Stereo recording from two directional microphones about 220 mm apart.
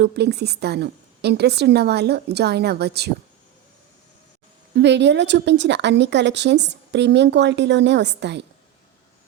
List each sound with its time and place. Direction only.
0.0 s speech: 50° right (ahead or behind)
4.7 s speech: 50° right (ahead or behind)